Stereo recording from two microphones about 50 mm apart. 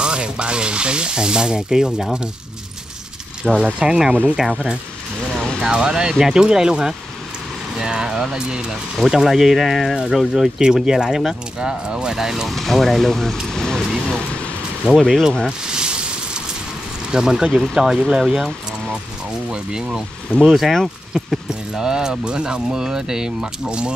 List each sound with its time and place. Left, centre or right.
0.0 s speech: centre
3.5 s speech: centre
8.9 s speech: centre
12.4 s speech: centre
13.5 s vehicle: centre
15.0 s speech: centre
15.4 s a sound: centre
17.1 s speech: centre
19.5 s speech: centre